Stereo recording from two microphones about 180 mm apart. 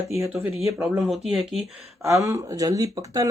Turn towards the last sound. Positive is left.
turn(degrees=-20)  # may be behind; listen again after turning